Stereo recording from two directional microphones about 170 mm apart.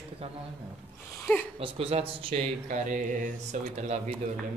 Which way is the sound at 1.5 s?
35° right (ahead or behind).